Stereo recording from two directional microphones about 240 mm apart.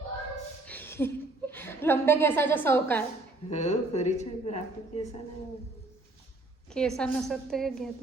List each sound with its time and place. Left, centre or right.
0.6 s chuckle: centre
3.5 s speech: left
6.7 s a woman's voice: centre